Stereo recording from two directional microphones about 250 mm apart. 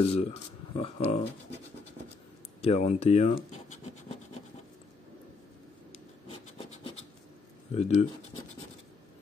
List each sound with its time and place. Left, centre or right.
0.1 s speech: left
2.6 s speech: left
7.7 s speech: left